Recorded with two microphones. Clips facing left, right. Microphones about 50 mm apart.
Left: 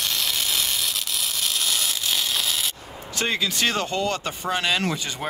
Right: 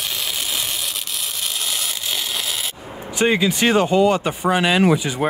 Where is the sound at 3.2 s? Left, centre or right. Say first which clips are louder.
Right 7 dB; centre.